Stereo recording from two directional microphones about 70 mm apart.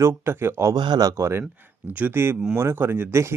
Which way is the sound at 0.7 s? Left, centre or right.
Right.